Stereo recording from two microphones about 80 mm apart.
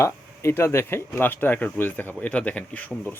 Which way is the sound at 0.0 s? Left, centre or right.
Left.